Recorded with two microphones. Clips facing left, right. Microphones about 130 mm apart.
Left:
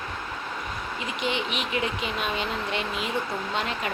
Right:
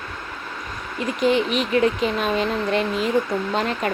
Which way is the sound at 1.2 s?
40° right (ahead or behind).